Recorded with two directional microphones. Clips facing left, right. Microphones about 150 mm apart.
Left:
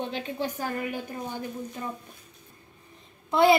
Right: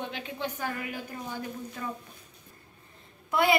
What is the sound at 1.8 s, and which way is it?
Speech, 25° left (ahead or behind).